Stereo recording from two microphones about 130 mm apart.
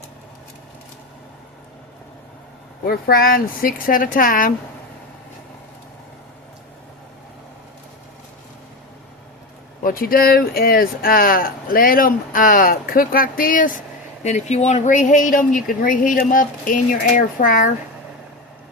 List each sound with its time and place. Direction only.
3.1 s speech: 90° left
9.8 s speech: 90° left
14.3 s speech: 60° left (ahead or behind); by 17.7 s 90° left